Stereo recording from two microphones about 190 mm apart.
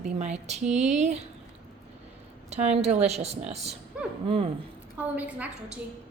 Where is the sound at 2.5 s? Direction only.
35° right (ahead or behind).